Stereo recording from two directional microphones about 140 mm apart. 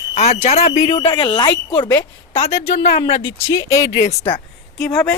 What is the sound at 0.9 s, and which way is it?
Speech, 35° left (ahead or behind).